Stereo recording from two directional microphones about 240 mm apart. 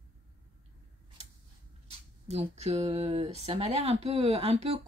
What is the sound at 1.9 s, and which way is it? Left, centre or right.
Speech, right.